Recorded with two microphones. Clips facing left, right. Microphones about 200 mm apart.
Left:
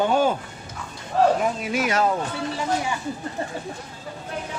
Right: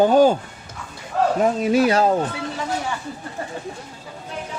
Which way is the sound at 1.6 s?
35° right (ahead or behind).